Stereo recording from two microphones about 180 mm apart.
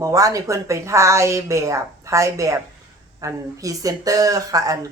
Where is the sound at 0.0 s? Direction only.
20° right (ahead or behind).